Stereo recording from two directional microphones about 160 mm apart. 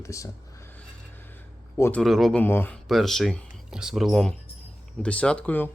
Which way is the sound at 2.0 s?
Centre (ahead or behind).